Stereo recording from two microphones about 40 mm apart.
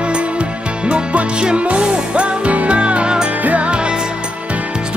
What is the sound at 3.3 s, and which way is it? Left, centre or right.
Music, right.